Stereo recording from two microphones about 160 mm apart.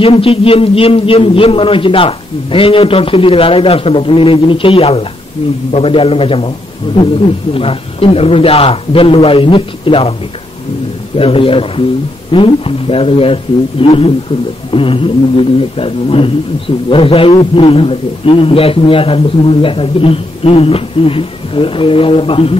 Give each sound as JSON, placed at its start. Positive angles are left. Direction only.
{"t": 0.0, "sound": "speech", "side_deg": 35}
{"t": 7.5, "sound": "speech", "side_deg": 35}
{"t": 11.1, "sound": "speech", "side_deg": 35}